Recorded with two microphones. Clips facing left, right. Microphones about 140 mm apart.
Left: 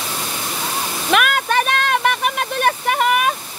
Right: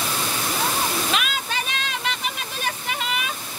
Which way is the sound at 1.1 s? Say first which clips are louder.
Left 9 dB; 60° left (ahead or behind).